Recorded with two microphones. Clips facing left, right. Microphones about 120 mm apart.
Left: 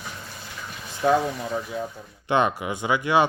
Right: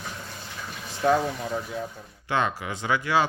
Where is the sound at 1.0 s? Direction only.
5° left (ahead or behind).